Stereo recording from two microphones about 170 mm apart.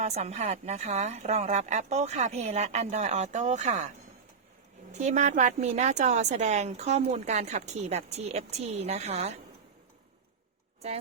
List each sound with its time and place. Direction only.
0.0 s a woman's voice: 40° right (ahead or behind)